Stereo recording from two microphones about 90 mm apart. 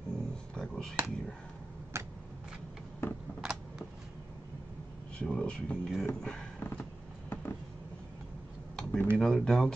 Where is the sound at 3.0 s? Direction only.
25° left (ahead or behind).